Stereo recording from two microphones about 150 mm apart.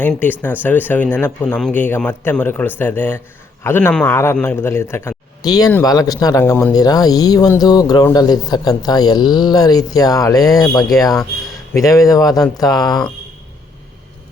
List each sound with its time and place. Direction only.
0.0 s a man's voice: 10° left (ahead or behind)